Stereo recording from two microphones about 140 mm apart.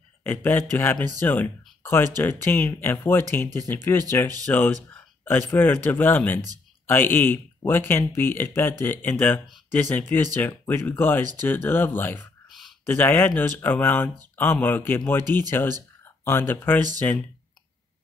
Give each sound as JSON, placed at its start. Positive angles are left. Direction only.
{"t": 0.2, "sound": "speech", "side_deg": 15}
{"t": 12.4, "sound": "a sound", "side_deg": 0}
{"t": 12.8, "sound": "speech", "side_deg": 15}